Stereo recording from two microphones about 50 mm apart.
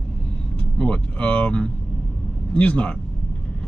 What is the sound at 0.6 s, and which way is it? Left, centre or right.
Speech, left.